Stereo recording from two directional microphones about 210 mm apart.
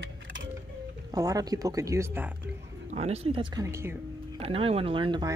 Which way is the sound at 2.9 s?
30° right (ahead or behind).